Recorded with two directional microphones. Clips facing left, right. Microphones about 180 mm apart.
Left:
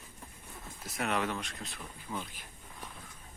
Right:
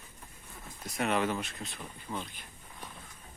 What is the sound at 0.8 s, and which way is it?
Speech, centre (ahead or behind).